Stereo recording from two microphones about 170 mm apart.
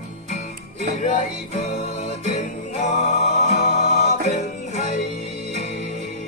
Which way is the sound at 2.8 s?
45° left (ahead or behind).